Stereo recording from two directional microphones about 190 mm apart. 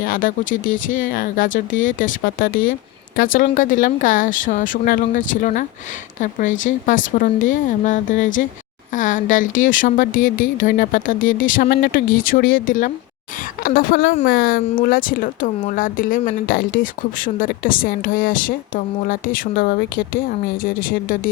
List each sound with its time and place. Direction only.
0.0 s a woman's voice: 45° left (ahead or behind)